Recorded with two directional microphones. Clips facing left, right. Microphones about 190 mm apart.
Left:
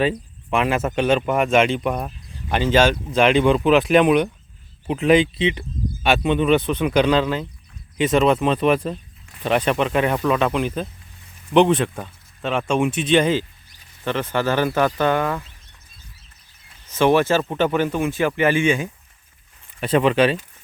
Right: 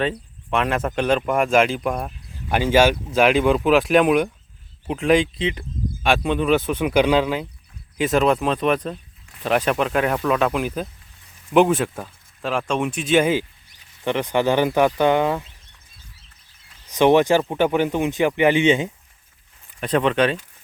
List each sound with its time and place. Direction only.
0.0 s speech: 5° left (ahead or behind); by 15.4 s 15° right (ahead or behind)
16.9 s speech: 15° right (ahead or behind)
19.8 s speech: 5° left (ahead or behind)